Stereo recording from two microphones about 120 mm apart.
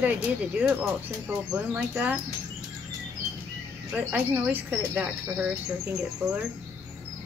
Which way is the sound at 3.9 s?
15° right (ahead or behind).